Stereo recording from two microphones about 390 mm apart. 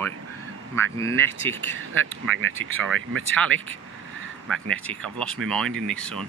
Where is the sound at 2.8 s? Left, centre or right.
Right.